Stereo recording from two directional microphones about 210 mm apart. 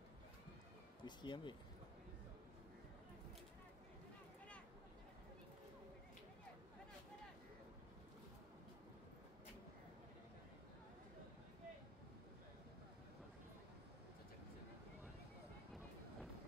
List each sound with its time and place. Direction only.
1.0 s speech: 20° left (ahead or behind)